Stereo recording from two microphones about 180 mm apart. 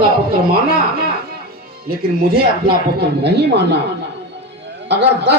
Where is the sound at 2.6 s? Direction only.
65° right (ahead or behind).